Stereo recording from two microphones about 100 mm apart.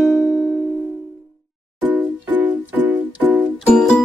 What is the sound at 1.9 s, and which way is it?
Music, 15° right (ahead or behind).